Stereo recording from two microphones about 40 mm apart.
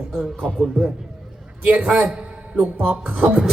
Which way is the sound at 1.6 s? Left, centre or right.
Right.